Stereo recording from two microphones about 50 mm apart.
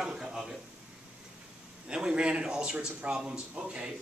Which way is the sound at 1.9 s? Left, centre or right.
Centre.